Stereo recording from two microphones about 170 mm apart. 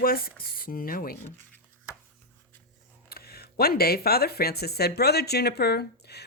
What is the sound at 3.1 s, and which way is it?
Speech, 65° left (ahead or behind).